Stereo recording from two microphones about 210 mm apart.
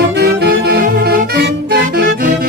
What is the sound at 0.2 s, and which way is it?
Music, 50° right (ahead or behind).